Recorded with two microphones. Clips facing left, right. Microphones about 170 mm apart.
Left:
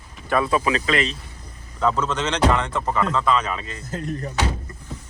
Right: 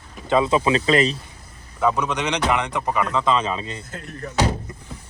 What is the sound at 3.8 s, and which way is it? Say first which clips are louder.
Speech: left 8 dB; 40° left (ahead or behind).